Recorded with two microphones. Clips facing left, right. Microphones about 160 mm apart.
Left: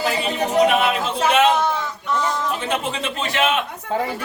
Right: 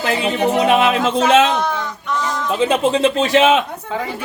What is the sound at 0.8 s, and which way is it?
Speech, 90° right.